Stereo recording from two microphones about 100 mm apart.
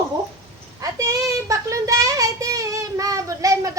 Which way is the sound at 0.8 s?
35° right (ahead or behind).